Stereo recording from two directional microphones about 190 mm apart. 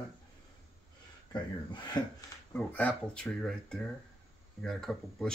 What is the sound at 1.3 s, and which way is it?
Speech, 25° left (ahead or behind).